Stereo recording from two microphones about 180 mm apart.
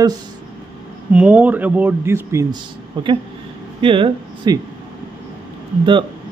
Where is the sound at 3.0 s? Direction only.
25° right (ahead or behind).